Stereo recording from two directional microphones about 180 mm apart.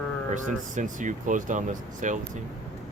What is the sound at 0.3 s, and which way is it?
Speech, 45° right (ahead or behind).